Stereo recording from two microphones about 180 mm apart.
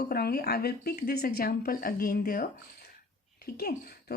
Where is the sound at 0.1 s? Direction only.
60° left (ahead or behind).